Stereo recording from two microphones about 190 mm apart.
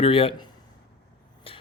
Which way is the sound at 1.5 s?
30° left (ahead or behind).